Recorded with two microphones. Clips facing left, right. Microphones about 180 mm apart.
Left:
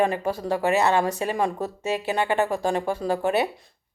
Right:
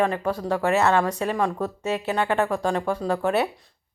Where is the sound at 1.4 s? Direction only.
20° left (ahead or behind).